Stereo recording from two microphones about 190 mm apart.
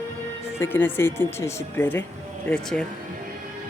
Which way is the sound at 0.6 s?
10° left (ahead or behind).